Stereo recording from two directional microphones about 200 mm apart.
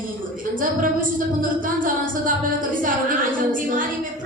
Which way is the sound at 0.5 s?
45° right (ahead or behind).